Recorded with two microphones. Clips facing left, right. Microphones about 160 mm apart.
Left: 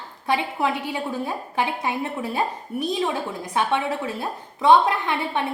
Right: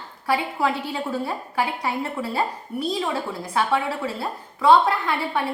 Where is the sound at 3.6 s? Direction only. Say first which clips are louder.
Even; 20° left (ahead or behind).